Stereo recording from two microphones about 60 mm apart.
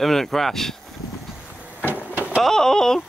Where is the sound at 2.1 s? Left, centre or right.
Right.